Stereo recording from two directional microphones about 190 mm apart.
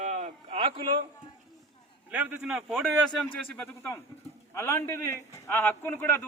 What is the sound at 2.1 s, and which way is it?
Speech, 10° right (ahead or behind).